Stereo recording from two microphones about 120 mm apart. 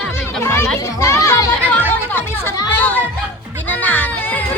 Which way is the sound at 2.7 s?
15° left (ahead or behind).